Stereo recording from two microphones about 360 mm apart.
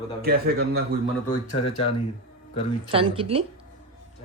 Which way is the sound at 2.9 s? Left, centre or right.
Centre.